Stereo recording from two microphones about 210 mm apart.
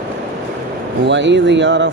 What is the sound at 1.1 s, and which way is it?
Speech, 60° right (ahead or behind).